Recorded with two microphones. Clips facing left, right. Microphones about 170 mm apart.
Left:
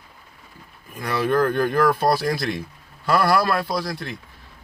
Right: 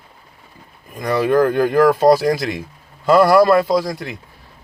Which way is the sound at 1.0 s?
15° right (ahead or behind).